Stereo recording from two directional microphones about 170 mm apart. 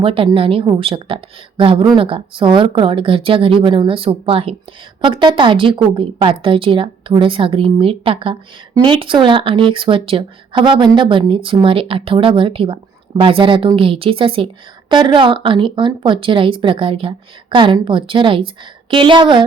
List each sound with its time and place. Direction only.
0.0 s speech: 30° right (ahead or behind)